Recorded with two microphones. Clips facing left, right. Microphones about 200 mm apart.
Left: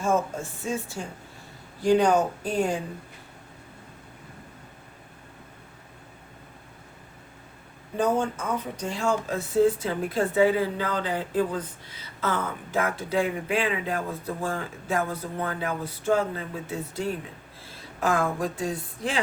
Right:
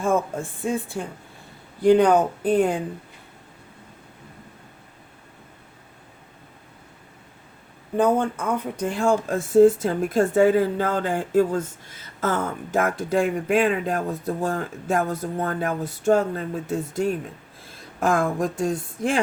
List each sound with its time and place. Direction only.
0.0 s speech: 55° right (ahead or behind)
7.9 s speech: 55° right (ahead or behind)